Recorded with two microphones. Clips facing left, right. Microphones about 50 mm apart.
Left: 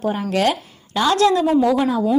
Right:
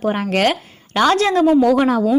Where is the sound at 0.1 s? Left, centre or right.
Right.